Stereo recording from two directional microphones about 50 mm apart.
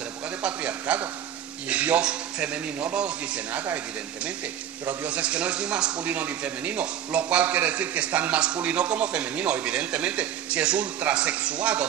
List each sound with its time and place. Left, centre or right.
0.4 s a man's voice: right
4.8 s a man's voice: right
6.0 s a man's voice: right